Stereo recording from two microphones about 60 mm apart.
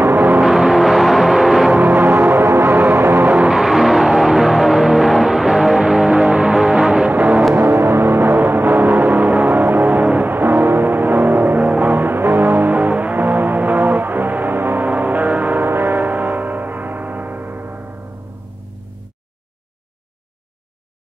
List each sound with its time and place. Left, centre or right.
0.0 s gong: right
0.4 s music: centre
1.7 s music: right
3.5 s music: centre
7.1 s music: right
7.5 s music: right